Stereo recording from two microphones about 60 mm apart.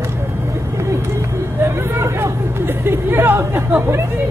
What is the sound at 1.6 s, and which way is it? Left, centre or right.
Chatter, right.